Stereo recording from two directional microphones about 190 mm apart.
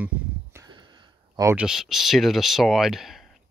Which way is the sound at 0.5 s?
20° right (ahead or behind).